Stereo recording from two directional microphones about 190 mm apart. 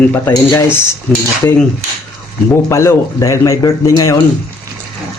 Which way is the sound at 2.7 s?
15° left (ahead or behind).